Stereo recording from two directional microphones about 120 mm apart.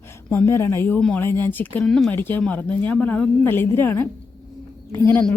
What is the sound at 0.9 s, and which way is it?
Speech, 5° left (ahead or behind).